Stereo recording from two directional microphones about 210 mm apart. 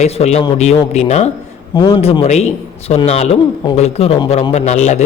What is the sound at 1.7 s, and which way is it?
A man's voice, 20° left (ahead or behind).